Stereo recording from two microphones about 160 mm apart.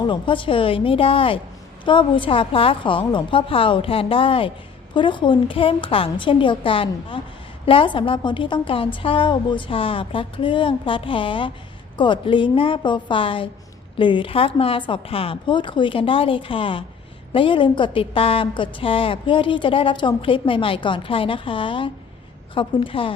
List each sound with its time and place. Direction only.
0.1 s a woman's voice: 30° left (ahead or behind)